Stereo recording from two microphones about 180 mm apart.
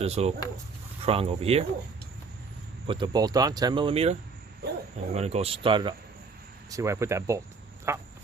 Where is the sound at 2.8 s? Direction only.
25° right (ahead or behind).